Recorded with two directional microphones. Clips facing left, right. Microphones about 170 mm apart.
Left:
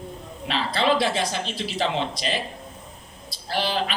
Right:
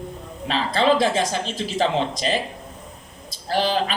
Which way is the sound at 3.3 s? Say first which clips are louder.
Right 4 dB; 45° right (ahead or behind).